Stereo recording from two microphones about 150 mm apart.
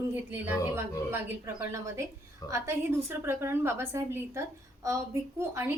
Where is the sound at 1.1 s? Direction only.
15° right (ahead or behind).